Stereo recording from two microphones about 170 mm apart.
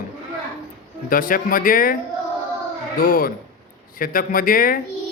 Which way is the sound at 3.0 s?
55° left (ahead or behind).